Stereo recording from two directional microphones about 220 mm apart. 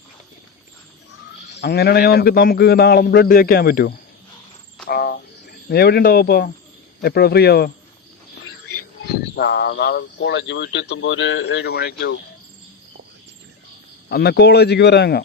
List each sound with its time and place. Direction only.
1.5 s speech: 50° left (ahead or behind)
4.9 s cricket: 45° left (ahead or behind)
7.0 s speech: 45° left (ahead or behind)
9.3 s speech: 50° left (ahead or behind)
14.1 s speech: 45° left (ahead or behind)